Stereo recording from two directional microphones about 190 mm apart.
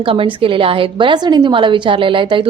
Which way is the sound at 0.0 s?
30° right (ahead or behind).